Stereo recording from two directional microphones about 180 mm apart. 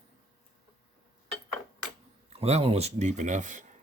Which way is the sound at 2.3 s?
35° right (ahead or behind).